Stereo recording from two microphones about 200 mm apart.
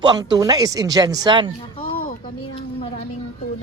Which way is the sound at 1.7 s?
40° left (ahead or behind).